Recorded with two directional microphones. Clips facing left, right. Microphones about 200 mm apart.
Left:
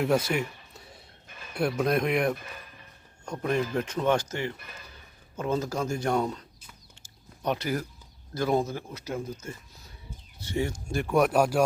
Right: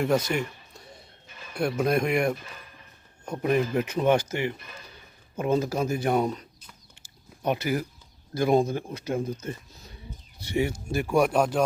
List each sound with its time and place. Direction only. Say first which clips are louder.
0.0 s a sound: right 1 dB; 5° left (ahead or behind)
1.8 s speech: right 2 dB; centre (ahead or behind); by 9.6 s 20° right (ahead or behind)
10.4 s speech: right 3 dB; 10° right (ahead or behind); by 11.6 s 5° left (ahead or behind)